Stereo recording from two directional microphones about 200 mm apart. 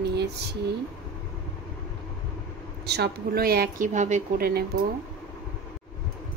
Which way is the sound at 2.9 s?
50° right (ahead or behind).